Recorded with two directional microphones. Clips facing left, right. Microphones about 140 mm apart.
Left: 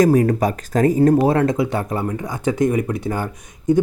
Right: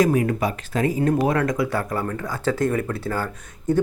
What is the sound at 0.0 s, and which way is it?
Speech, 40° left (ahead or behind).